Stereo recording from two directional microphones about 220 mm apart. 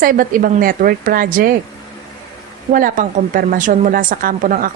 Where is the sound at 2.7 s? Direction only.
40° right (ahead or behind).